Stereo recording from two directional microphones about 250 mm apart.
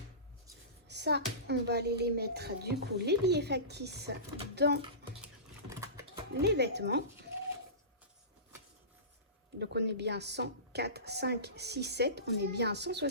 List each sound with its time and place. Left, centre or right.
0.9 s a woman's voice: right
5.2 s vehicle: centre
6.4 s a woman's voice: right
9.6 s a woman's voice: right